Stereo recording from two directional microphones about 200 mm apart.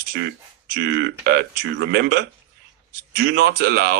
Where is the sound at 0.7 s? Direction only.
55° right (ahead or behind).